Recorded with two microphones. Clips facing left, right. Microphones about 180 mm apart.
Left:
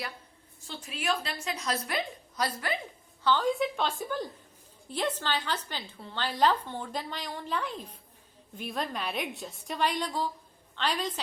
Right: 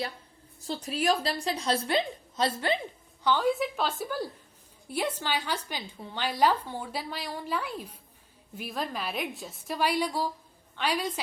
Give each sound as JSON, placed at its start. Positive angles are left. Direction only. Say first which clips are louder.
{"t": 0.6, "sound": "a woman's voice", "louder": "right 7 dB", "side_deg": -35}
{"t": 3.2, "sound": "a woman's voice", "louder": "right 1 dB", "side_deg": -10}